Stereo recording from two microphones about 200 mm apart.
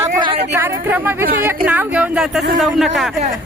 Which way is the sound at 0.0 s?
25° right (ahead or behind).